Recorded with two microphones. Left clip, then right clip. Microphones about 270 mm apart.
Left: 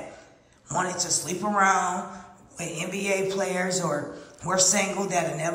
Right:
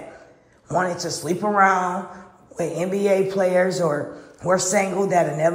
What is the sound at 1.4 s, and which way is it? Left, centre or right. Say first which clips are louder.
Speech: right 5 dB; centre.